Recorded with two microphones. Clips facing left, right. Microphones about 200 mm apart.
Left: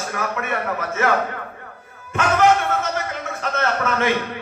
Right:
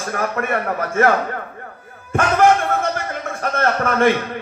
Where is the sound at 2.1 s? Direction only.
50° right (ahead or behind).